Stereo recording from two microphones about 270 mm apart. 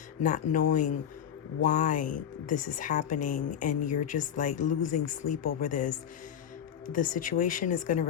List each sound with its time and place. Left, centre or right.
0.2 s speech: left
4.9 s speech: left
5.5 s speech: left